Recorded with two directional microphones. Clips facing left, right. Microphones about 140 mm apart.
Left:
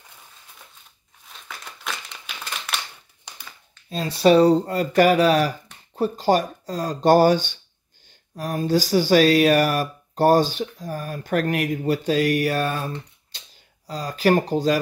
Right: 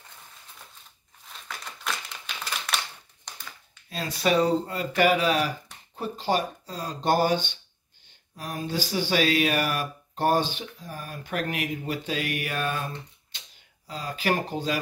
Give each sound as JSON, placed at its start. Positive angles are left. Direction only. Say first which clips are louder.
{"t": 1.3, "sound": "crumpling", "louder": "even", "side_deg": 0}
{"t": 3.9, "sound": "speech", "louder": "left 8 dB", "side_deg": 30}